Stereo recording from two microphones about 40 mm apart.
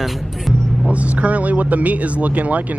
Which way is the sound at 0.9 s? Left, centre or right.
Right.